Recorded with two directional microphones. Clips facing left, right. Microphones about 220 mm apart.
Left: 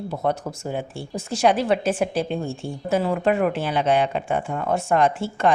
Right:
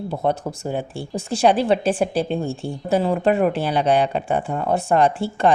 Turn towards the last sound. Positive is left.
turn(degrees=-35)  # may be behind; listen again after turning